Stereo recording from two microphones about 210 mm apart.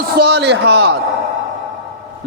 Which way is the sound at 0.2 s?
50° right (ahead or behind).